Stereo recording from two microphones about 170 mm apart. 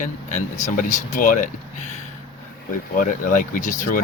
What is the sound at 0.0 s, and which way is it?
Speech, 45° left (ahead or behind).